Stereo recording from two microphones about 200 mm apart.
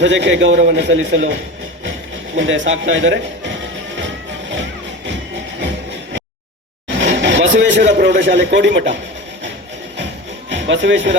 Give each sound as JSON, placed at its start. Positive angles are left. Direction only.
{"t": 0.0, "sound": "a man's voice", "side_deg": -65}
{"t": 1.8, "sound": "music", "side_deg": -65}
{"t": 6.8, "sound": "speech", "side_deg": -65}
{"t": 10.5, "sound": "speech", "side_deg": -65}